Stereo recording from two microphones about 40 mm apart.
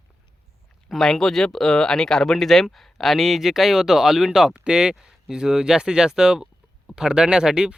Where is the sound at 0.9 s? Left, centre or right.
Centre.